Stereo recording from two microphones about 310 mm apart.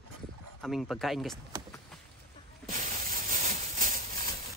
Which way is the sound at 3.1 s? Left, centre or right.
Right.